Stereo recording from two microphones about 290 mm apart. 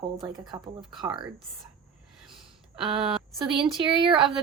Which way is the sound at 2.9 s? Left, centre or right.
Centre.